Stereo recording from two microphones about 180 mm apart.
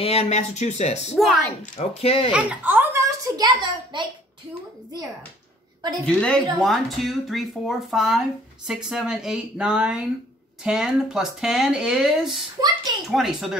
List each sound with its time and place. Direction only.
0.0 s speech: 35° left (ahead or behind)
1.1 s speech: centre (ahead or behind)
1.8 s speech: 30° left (ahead or behind)
2.3 s a child's voice: 10° right (ahead or behind); by 4.0 s 25° right (ahead or behind)
5.8 s a sound: 20° right (ahead or behind)
6.0 s speech: 5° left (ahead or behind)